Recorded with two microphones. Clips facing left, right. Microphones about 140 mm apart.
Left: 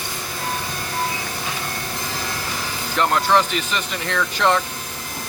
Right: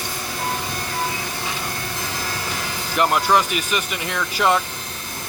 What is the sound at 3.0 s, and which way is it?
Speech, 10° right (ahead or behind).